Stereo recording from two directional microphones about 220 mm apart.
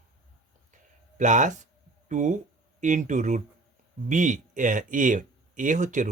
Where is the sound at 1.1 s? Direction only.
35° right (ahead or behind).